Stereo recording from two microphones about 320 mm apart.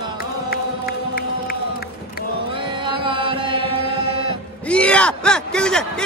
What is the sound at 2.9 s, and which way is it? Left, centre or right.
Music, centre.